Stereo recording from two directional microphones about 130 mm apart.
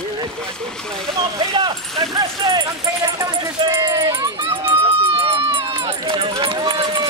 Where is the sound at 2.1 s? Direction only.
35° right (ahead or behind).